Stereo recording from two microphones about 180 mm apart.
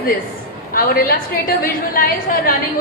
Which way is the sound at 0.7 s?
50° left (ahead or behind).